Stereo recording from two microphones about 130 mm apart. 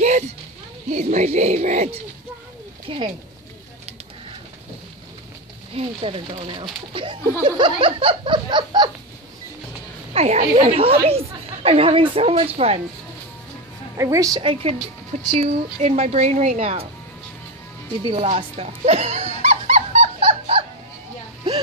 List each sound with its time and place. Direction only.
0.9 s a woman's voice: 55° right (ahead or behind)
2.9 s laughter: 40° right (ahead or behind)
5.8 s speech: 45° right (ahead or behind)
6.9 s laughter: 40° right (ahead or behind)
10.1 s speech: 55° right (ahead or behind)
13.9 s a woman's voice: 25° right (ahead or behind)
14.4 s speech: 45° right (ahead or behind)
15.4 s a woman's voice: 55° right (ahead or behind)
18.0 s music: 50° right (ahead or behind)